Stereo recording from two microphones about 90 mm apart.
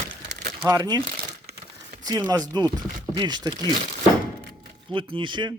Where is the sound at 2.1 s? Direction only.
45° right (ahead or behind).